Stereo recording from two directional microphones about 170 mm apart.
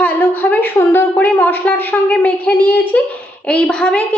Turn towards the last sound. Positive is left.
turn(degrees=5)  # may be behind; listen again after turning